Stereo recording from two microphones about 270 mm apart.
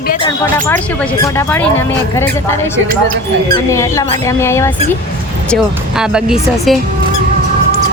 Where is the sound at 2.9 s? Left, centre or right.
Right.